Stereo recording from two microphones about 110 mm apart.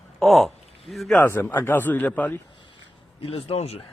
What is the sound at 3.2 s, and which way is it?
Speech, 60° left (ahead or behind).